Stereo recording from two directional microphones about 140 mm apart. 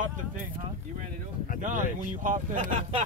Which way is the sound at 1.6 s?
70° right (ahead or behind).